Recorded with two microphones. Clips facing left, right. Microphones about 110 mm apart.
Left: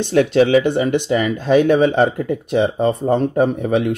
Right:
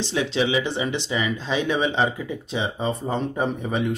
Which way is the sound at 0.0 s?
55° left (ahead or behind).